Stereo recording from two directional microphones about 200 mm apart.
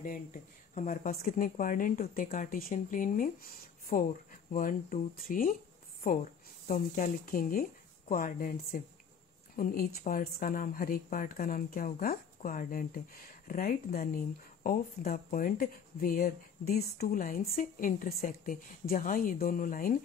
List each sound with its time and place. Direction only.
0.0 s speech: 40° left (ahead or behind)
6.7 s speech: 45° left (ahead or behind)